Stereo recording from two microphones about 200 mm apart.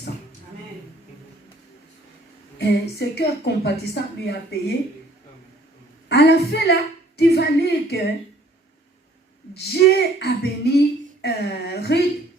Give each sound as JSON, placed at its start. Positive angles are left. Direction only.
{"t": 2.6, "sound": "a woman's voice", "side_deg": 55}
{"t": 6.1, "sound": "a woman's voice", "side_deg": 55}
{"t": 9.7, "sound": "speech", "side_deg": 55}